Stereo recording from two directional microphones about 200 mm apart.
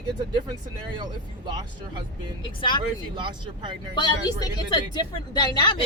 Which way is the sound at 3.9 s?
20° left (ahead or behind).